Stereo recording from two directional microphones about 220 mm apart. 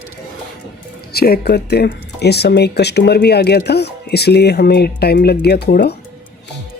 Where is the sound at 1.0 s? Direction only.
45° left (ahead or behind).